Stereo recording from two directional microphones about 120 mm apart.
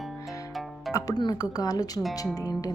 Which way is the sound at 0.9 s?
30° left (ahead or behind).